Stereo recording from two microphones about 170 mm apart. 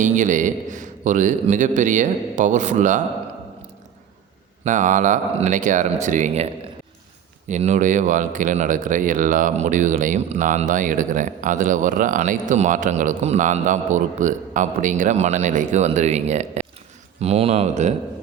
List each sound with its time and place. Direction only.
0.0 s speech: 45° right (ahead or behind)
4.6 s speech: 45° right (ahead or behind)